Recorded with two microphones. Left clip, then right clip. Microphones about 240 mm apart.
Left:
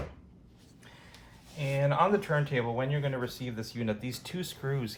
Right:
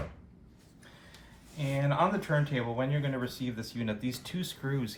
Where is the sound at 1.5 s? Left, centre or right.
Left.